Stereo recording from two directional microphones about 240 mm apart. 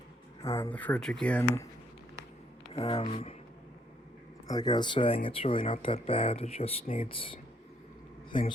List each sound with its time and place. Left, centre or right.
0.5 s speech: centre
2.7 s speech: left
4.4 s speech: centre